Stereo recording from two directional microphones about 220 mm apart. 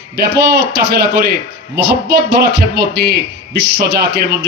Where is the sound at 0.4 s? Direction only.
45° right (ahead or behind).